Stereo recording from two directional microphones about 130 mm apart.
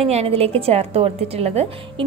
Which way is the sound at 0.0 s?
50° right (ahead or behind).